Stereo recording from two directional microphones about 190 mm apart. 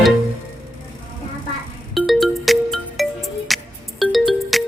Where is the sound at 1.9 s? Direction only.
Centre (ahead or behind).